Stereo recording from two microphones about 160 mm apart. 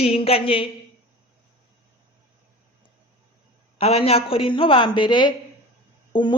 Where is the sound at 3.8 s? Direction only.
40° left (ahead or behind).